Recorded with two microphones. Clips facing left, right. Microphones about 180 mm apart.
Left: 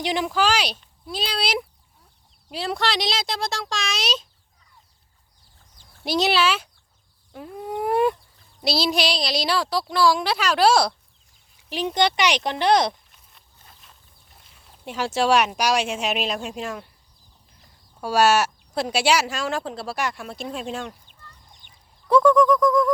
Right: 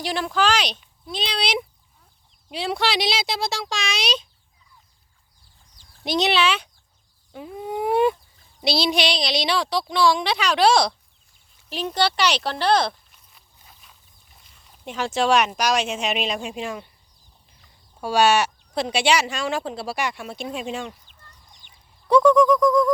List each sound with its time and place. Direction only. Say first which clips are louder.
0.0 s speech: even; 15° left (ahead or behind); by 4.3 s centre (ahead or behind)
6.1 s speech: even; 5° left (ahead or behind)
7.3 s a sound: right 1 dB; 5° right (ahead or behind)
8.6 s speech: right 1 dB; centre (ahead or behind); by 13.0 s 20° left (ahead or behind)
14.8 s speech: even; 10° left (ahead or behind)
18.0 s speech: even; 5° left (ahead or behind)
22.1 s speech: right 1 dB; centre (ahead or behind)